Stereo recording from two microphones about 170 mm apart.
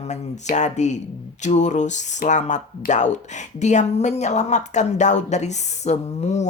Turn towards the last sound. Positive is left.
turn(degrees=40)  # may be behind; listen again after turning